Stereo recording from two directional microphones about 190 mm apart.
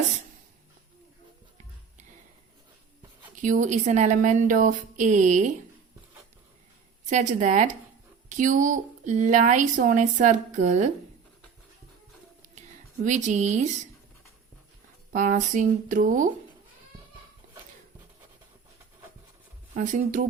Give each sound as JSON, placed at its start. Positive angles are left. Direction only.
{"t": 3.4, "sound": "speech", "side_deg": -40}
{"t": 7.1, "sound": "speech", "side_deg": -40}
{"t": 13.1, "sound": "speech", "side_deg": -40}
{"t": 15.1, "sound": "speech", "side_deg": -40}
{"t": 19.7, "sound": "speech", "side_deg": -40}